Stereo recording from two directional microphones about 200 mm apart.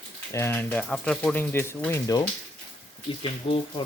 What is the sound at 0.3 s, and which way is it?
Speech, 10° left (ahead or behind).